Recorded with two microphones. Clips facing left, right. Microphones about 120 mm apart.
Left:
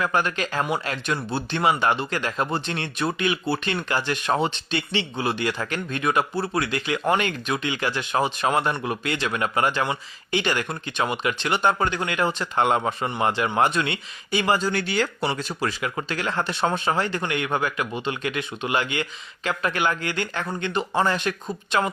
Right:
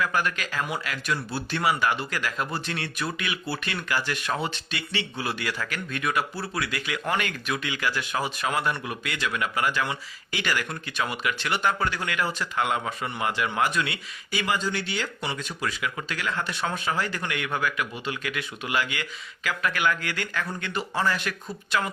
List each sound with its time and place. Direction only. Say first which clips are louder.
0.0 s speech: left 3 dB; 25° left (ahead or behind)
14.7 s speech: left 6 dB; 50° left (ahead or behind); by 21.8 s 25° left (ahead or behind)